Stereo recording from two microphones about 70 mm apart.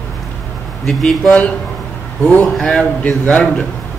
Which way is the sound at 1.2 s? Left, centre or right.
Left.